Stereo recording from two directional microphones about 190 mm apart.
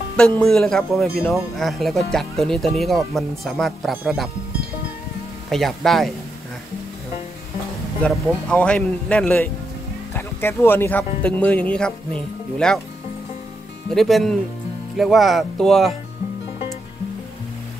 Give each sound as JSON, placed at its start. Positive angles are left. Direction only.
{"t": 0.4, "sound": "speech", "side_deg": 5}
{"t": 5.5, "sound": "speech", "side_deg": 0}
{"t": 8.0, "sound": "speech", "side_deg": 5}
{"t": 13.8, "sound": "speech", "side_deg": 0}